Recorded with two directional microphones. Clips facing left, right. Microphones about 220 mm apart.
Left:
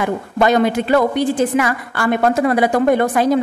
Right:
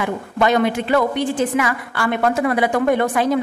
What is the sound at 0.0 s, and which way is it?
A woman's voice, 40° left (ahead or behind).